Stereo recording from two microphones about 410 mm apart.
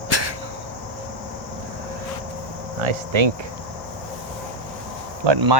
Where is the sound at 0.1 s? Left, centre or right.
Right.